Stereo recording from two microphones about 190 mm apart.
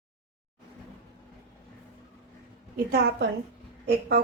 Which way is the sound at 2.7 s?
55° right (ahead or behind).